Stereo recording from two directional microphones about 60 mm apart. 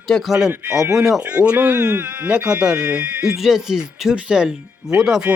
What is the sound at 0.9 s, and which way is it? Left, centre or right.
Speech, centre.